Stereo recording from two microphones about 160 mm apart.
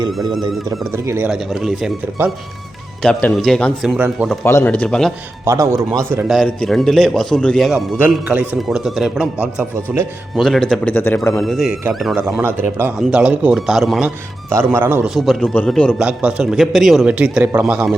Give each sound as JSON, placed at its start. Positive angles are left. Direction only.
{"t": 0.1, "sound": "speech", "side_deg": 0}
{"t": 0.9, "sound": "speech", "side_deg": -15}
{"t": 1.3, "sound": "speech", "side_deg": 0}
{"t": 3.0, "sound": "speech", "side_deg": 5}
{"t": 4.4, "sound": "speech", "side_deg": 15}
{"t": 5.5, "sound": "speech", "side_deg": -15}
{"t": 6.2, "sound": "speech", "side_deg": 0}
{"t": 11.4, "sound": "speech", "side_deg": 0}
{"t": 12.5, "sound": "speech", "side_deg": -15}
{"t": 14.5, "sound": "speech", "side_deg": -15}
{"t": 15.1, "sound": "speech", "side_deg": 0}
{"t": 16.0, "sound": "speech", "side_deg": -5}